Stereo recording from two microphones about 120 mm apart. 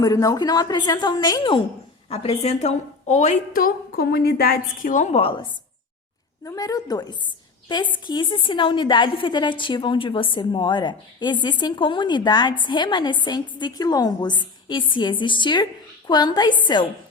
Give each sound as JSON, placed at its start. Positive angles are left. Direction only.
{"t": 0.0, "sound": "a woman's voice", "side_deg": 30}
{"t": 2.0, "sound": "a woman's voice", "side_deg": 60}
{"t": 4.9, "sound": "a woman's voice", "side_deg": 90}
{"t": 5.2, "sound": "a woman's voice", "side_deg": 45}
{"t": 6.4, "sound": "a woman's voice", "side_deg": 30}